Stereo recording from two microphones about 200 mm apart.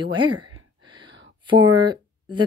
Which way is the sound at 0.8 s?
20° right (ahead or behind).